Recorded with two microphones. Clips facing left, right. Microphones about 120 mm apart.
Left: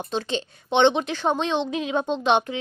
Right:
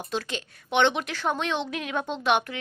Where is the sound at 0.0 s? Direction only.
25° left (ahead or behind).